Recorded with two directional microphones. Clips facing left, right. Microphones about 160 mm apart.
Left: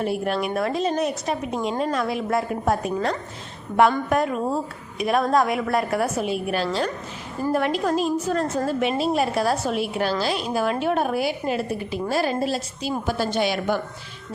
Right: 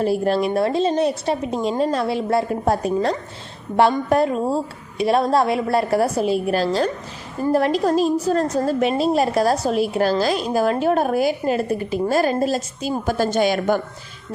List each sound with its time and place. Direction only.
0.0 s a woman's voice: 35° right (ahead or behind)